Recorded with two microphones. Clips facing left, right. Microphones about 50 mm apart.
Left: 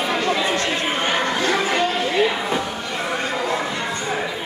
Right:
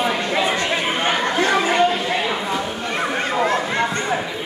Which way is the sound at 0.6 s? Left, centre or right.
Centre.